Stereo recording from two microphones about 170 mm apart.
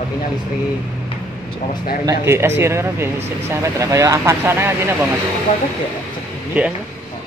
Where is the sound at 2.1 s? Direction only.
15° right (ahead or behind).